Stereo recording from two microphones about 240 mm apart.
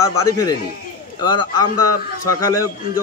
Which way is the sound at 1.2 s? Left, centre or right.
Centre.